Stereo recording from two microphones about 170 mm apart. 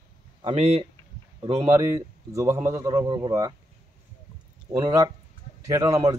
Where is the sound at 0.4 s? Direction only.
35° right (ahead or behind).